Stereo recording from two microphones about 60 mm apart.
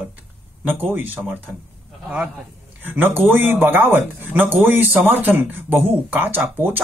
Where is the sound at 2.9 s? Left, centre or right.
Right.